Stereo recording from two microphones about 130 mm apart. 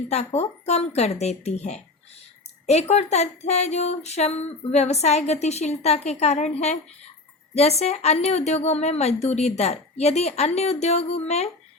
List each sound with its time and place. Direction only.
0.1 s speech: 55° left (ahead or behind)